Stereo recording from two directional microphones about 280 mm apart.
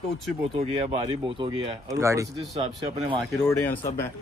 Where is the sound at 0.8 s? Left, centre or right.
Right.